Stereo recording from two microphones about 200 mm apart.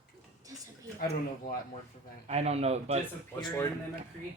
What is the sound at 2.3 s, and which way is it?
Speech, 30° right (ahead or behind).